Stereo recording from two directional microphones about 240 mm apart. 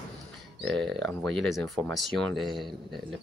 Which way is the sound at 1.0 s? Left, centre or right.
Centre.